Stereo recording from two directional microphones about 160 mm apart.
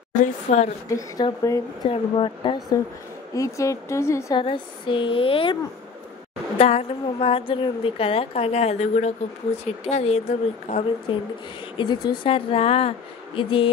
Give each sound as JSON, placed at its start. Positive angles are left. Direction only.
{"t": 0.1, "sound": "a woman's voice", "side_deg": 45}
{"t": 0.8, "sound": "a woman's voice", "side_deg": 20}
{"t": 1.9, "sound": "a woman's voice", "side_deg": 35}
{"t": 3.3, "sound": "a woman's voice", "side_deg": 20}
{"t": 4.4, "sound": "a woman's voice", "side_deg": 30}
{"t": 6.6, "sound": "a woman's voice", "side_deg": 40}
{"t": 11.8, "sound": "a woman's voice", "side_deg": 25}